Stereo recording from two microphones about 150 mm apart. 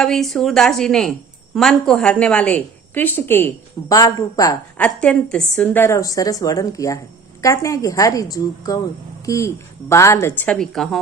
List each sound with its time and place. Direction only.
0.0 s a woman's voice: centre (ahead or behind); by 4.5 s 25° left (ahead or behind)
4.8 s a woman's voice: 5° left (ahead or behind)